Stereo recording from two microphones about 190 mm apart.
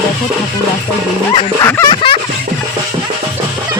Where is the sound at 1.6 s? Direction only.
20° left (ahead or behind).